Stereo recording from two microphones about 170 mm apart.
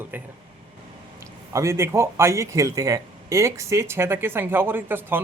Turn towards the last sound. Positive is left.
turn(degrees=-10)  # may be behind; listen again after turning